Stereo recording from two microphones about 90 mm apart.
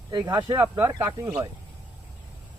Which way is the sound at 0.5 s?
30° right (ahead or behind).